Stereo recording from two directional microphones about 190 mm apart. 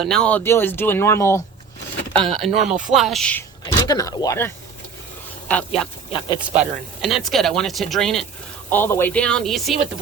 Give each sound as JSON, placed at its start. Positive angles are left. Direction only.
{"t": 0.0, "sound": "speech", "side_deg": 5}
{"t": 2.2, "sound": "speech", "side_deg": 0}
{"t": 3.8, "sound": "speech", "side_deg": 20}